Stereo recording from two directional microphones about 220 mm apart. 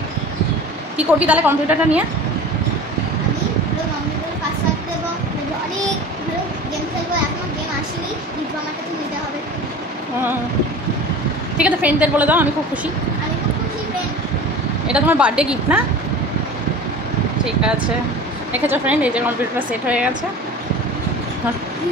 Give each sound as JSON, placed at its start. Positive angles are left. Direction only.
{"t": 0.9, "sound": "a woman's voice", "side_deg": -5}
{"t": 11.5, "sound": "a woman's voice", "side_deg": -5}
{"t": 14.9, "sound": "a woman's voice", "side_deg": -5}
{"t": 18.5, "sound": "a woman's voice", "side_deg": -5}